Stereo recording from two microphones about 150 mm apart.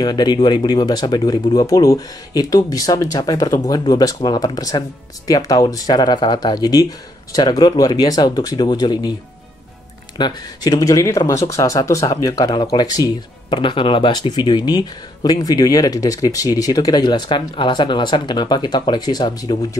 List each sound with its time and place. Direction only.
0.0 s speech: 30° left (ahead or behind)
10.1 s speech: 30° left (ahead or behind)